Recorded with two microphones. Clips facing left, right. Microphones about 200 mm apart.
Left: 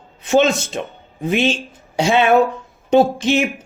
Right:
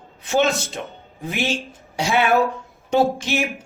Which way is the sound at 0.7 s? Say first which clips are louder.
Left 5 dB; 20° left (ahead or behind).